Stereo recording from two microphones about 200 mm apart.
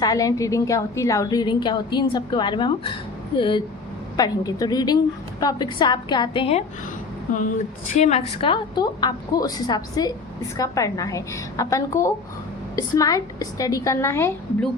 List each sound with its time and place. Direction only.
0.0 s a woman's voice: 15° left (ahead or behind)
7.9 s a woman's voice: 35° left (ahead or behind); by 14.3 s 15° left (ahead or behind)